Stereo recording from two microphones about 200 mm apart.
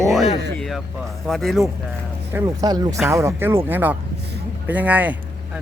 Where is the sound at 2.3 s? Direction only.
15° right (ahead or behind).